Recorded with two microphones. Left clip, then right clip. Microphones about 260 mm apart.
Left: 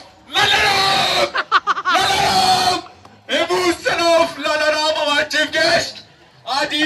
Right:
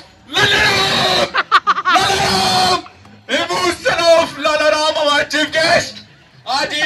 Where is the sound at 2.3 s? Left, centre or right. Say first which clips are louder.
Right 1 dB; centre.